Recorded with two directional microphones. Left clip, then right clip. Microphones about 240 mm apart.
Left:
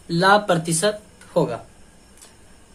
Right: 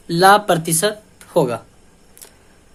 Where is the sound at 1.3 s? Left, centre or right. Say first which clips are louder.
Right 4 dB; right.